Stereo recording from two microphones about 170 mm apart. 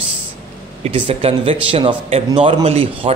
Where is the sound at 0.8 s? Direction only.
30° right (ahead or behind).